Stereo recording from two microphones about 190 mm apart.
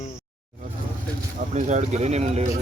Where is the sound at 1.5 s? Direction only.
40° right (ahead or behind).